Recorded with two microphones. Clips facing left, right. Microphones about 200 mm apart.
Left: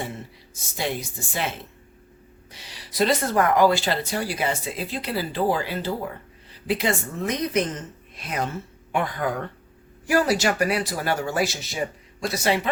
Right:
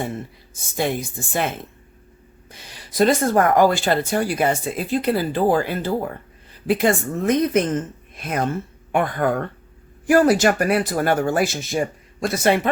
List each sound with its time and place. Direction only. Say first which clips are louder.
0.5 s speech: right 5 dB; 50° right (ahead or behind)